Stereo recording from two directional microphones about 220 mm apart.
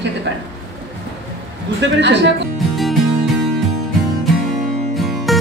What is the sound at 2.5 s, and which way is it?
Music, centre (ahead or behind).